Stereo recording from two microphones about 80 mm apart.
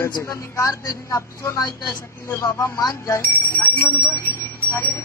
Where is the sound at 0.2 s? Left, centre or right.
Left.